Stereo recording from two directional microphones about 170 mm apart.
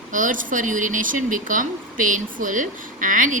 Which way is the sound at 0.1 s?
50° right (ahead or behind).